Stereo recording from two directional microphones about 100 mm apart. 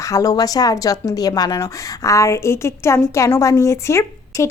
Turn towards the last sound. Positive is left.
turn(degrees=30)  # may be behind; listen again after turning